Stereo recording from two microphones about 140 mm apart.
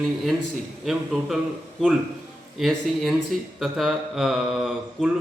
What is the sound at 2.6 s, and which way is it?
Speech, centre (ahead or behind).